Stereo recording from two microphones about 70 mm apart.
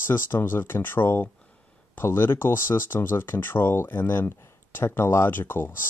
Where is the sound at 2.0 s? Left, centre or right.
Left.